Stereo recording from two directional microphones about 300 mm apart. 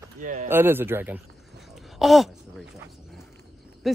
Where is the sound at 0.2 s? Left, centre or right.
Right.